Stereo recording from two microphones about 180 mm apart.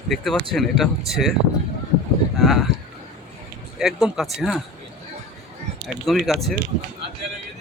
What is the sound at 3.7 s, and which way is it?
Speech, centre (ahead or behind).